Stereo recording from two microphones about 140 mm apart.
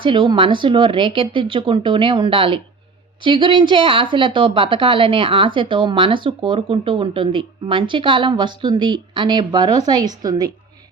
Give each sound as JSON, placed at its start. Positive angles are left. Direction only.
{"t": 0.0, "sound": "a woman's voice", "side_deg": -35}